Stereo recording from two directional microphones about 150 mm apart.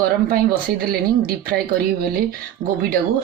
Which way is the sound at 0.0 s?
80° right.